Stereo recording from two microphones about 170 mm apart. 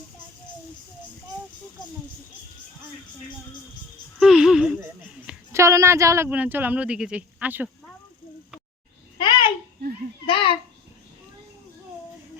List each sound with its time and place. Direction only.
4.2 s a sound: 5° right (ahead or behind)
5.5 s speech: 15° right (ahead or behind)
9.1 s babbling: 30° left (ahead or behind)
10.2 s a child's voice: 30° left (ahead or behind)